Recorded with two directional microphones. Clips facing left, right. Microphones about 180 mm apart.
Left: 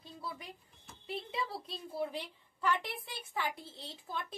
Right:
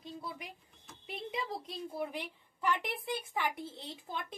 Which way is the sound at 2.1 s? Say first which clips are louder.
Right 1 dB; 15° right (ahead or behind).